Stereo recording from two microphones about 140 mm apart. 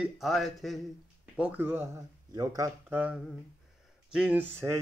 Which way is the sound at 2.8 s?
10° right (ahead or behind).